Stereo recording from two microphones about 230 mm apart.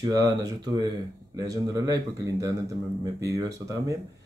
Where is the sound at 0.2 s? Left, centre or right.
Centre.